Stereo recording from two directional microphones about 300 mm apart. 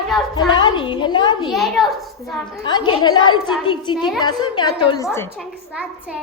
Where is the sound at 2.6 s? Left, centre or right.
Centre.